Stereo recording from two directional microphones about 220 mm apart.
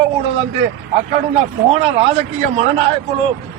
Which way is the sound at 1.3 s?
30° right (ahead or behind).